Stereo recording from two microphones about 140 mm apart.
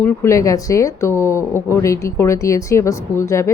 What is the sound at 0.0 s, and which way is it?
Speech, 20° left (ahead or behind).